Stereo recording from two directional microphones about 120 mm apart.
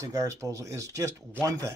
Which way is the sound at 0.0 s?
30° right (ahead or behind).